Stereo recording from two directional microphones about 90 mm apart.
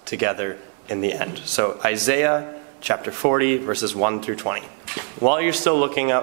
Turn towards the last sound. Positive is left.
turn(degrees=-15)  # may be behind; listen again after turning